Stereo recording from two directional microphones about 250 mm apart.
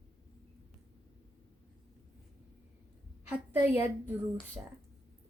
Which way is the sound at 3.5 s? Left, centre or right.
Centre.